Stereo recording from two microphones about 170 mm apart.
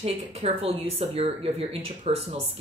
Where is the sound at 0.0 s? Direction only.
35° right (ahead or behind).